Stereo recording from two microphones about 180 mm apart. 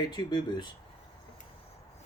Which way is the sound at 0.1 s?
25° left (ahead or behind).